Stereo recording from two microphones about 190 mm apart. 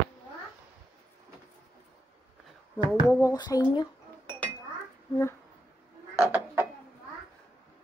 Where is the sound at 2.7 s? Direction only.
15° left (ahead or behind).